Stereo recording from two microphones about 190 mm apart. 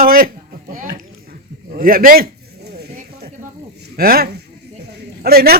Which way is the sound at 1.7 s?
50° right (ahead or behind).